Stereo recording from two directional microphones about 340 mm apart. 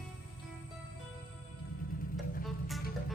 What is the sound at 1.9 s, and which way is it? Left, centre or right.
Music, left.